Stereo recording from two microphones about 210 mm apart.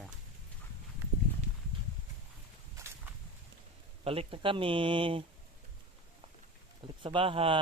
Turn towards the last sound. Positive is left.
turn(degrees=-25)  # may be behind; listen again after turning